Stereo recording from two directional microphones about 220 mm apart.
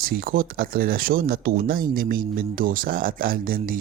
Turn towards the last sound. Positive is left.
turn(degrees=-40)  # may be behind; listen again after turning